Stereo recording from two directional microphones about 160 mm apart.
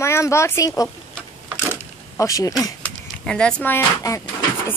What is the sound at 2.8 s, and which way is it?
Speech, 5° left (ahead or behind).